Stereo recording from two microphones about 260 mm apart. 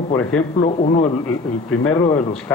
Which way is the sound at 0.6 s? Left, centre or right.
Left.